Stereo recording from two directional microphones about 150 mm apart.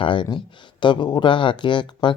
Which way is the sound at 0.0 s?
35° left (ahead or behind).